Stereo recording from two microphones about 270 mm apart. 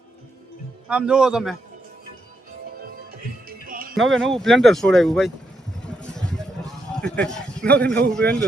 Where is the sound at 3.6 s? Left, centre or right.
Right.